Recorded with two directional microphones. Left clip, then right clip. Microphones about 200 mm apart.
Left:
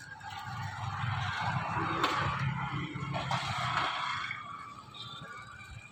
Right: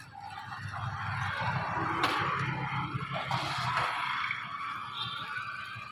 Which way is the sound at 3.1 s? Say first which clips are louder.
Left 1 dB; 30° right (ahead or behind).